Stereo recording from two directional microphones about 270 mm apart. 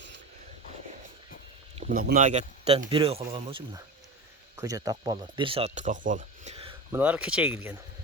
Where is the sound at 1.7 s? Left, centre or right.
Right.